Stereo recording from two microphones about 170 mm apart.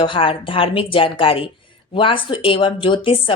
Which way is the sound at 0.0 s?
30° left (ahead or behind).